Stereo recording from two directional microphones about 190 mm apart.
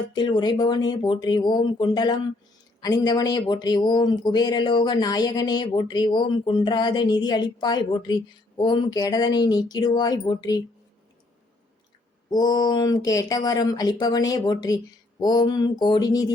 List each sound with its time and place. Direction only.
0.1 s speech: 25° left (ahead or behind)
12.3 s speech: 20° left (ahead or behind)